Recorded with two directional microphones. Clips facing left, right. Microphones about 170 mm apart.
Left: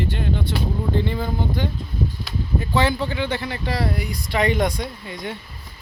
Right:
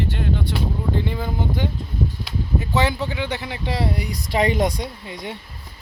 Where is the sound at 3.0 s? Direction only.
15° right (ahead or behind).